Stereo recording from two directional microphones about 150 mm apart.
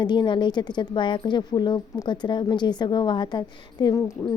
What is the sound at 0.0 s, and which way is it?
Speech, 30° left (ahead or behind).